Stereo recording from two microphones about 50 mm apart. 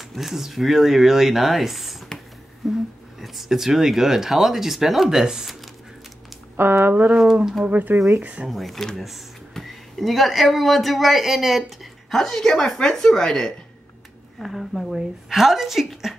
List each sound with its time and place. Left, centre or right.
0.1 s speech: centre
6.8 s speech: right
8.5 s speech: centre
14.4 s a woman's voice: centre